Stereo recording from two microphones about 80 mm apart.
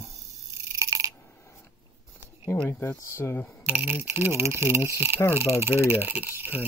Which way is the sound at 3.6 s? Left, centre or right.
Right.